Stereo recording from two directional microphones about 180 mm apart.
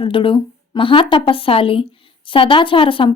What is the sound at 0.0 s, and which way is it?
Speech, 30° left (ahead or behind).